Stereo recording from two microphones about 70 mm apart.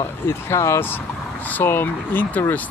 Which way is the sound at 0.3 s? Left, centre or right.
Left.